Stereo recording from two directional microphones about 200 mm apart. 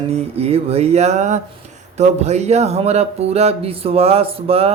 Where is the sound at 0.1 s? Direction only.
30° right (ahead or behind).